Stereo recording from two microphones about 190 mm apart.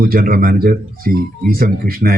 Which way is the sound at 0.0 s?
50° right (ahead or behind).